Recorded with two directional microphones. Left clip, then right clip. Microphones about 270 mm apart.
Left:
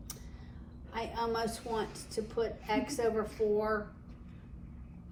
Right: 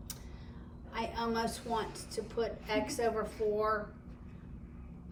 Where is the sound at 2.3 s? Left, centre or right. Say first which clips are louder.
Left 1 dB; centre.